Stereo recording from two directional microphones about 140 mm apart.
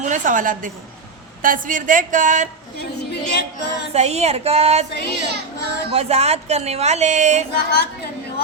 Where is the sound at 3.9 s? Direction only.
50° right (ahead or behind).